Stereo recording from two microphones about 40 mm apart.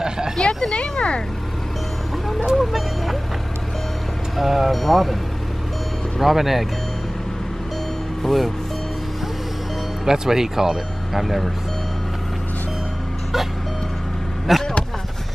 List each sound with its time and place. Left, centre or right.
0.4 s a sound: centre
2.5 s music: centre
4.4 s speech: centre
4.7 s speech: centre
6.1 s speech: centre
8.2 s speech: centre
10.0 s speech: centre
14.5 s vehicle: centre